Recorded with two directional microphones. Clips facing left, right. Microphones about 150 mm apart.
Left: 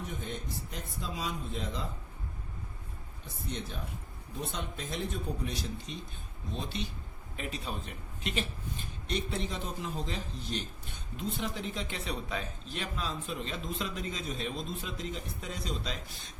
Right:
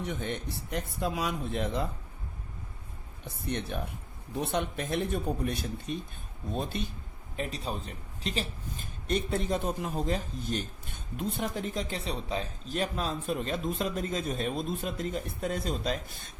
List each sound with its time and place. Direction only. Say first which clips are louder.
0.0 s speech: right 5 dB; 75° right (ahead or behind)
3.2 s a man's voice: right 5 dB; 65° right (ahead or behind)
7.3 s a man's voice: right 4 dB; 35° right (ahead or behind)